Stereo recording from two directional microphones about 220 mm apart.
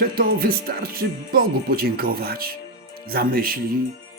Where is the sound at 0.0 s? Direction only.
40° right (ahead or behind).